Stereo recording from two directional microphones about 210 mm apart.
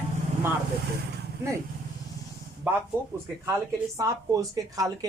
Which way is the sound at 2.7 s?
10° right (ahead or behind).